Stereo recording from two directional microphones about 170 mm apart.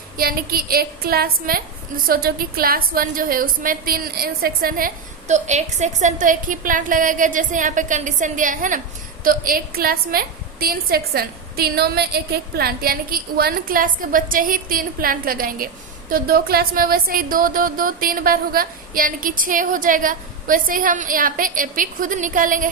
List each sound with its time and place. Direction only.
0.2 s a woman's voice: 60° right (ahead or behind)
5.3 s a woman's voice: 45° right (ahead or behind)